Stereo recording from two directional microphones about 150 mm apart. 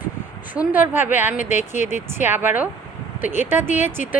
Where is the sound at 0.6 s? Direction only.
10° right (ahead or behind).